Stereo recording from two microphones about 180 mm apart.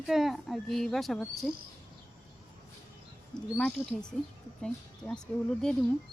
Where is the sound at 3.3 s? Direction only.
5° left (ahead or behind).